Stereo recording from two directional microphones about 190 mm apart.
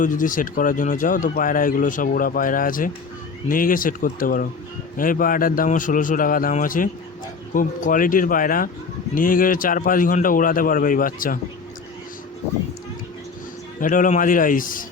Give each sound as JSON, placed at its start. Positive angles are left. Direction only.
{"t": 0.0, "sound": "speech", "side_deg": 45}
{"t": 13.7, "sound": "speech", "side_deg": 45}